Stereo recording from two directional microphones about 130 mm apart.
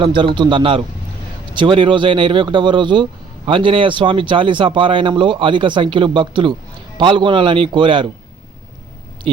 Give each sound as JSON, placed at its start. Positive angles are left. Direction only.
{"t": 0.0, "sound": "speech", "side_deg": -40}
{"t": 9.2, "sound": "speech", "side_deg": -45}